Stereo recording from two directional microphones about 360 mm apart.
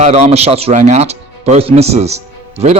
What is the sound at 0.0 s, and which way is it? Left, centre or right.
Speech, centre.